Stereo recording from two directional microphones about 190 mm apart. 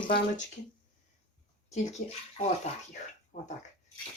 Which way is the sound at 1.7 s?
35° left (ahead or behind).